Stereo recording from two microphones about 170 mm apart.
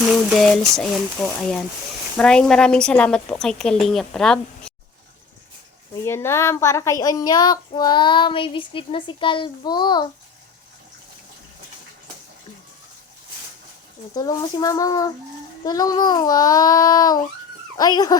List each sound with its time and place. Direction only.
0.3 s a woman's voice: centre (ahead or behind)
6.1 s child singing: 15° left (ahead or behind)
14.2 s child singing: 25° left (ahead or behind)